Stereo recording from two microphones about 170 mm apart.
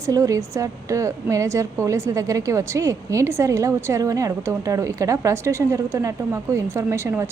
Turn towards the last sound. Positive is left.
turn(degrees=-15)  # may be behind; listen again after turning